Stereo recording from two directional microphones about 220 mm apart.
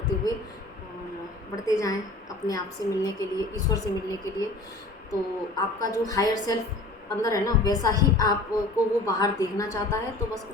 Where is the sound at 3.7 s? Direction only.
15° left (ahead or behind).